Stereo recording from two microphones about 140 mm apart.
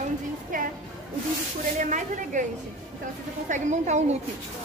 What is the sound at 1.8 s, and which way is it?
Speech, 60° right (ahead or behind).